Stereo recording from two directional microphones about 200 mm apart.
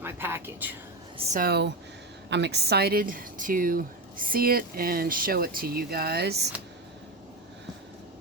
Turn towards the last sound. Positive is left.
turn(degrees=-55)  # may be behind; listen again after turning